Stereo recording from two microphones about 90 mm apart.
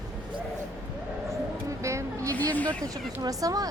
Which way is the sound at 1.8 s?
35° right (ahead or behind).